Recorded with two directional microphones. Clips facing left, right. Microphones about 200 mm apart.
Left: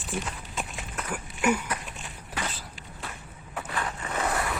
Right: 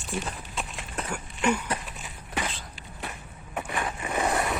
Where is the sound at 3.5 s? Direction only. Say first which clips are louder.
Right 2 dB; 15° right (ahead or behind).